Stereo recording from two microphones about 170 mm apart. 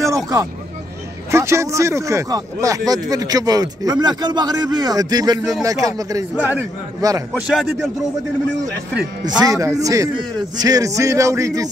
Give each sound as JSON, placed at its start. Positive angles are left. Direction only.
{"t": 0.0, "sound": "vehicle", "side_deg": -20}
{"t": 1.3, "sound": "speech", "side_deg": -15}
{"t": 6.3, "sound": "speech", "side_deg": -10}
{"t": 7.0, "sound": "speech", "side_deg": -20}
{"t": 7.4, "sound": "a man's voice", "side_deg": 0}
{"t": 9.4, "sound": "speech", "side_deg": -20}